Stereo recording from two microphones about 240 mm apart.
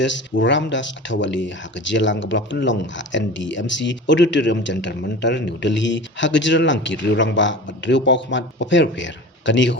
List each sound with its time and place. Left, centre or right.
0.0 s speech: left